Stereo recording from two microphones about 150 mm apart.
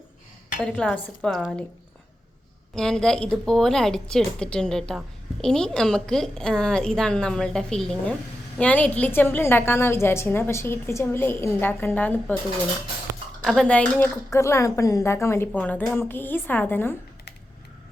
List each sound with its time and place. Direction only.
0.6 s a woman's voice: 5° left (ahead or behind)
2.7 s a woman's voice: 5° left (ahead or behind)
13.4 s a woman's voice: 5° left (ahead or behind)
14.3 s a woman's voice: 20° left (ahead or behind)